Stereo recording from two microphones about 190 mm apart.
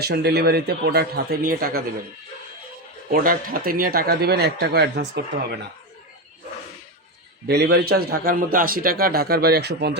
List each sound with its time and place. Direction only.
0.0 s a man's voice: 60° right (ahead or behind)
3.1 s a man's voice: 50° right (ahead or behind)
7.4 s a man's voice: 60° right (ahead or behind)